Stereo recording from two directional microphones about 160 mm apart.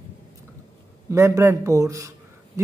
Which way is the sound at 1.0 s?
20° right (ahead or behind).